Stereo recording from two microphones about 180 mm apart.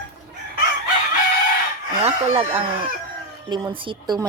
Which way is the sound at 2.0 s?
35° right (ahead or behind).